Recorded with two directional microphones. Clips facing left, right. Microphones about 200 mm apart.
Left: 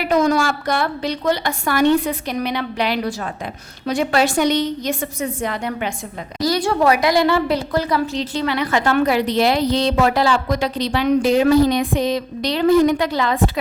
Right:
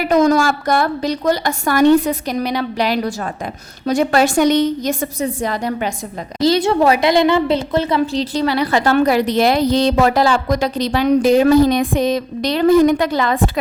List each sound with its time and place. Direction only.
0.0 s a woman's voice: 45° right (ahead or behind)
6.4 s a woman's voice: 25° right (ahead or behind); by 13.4 s 50° right (ahead or behind)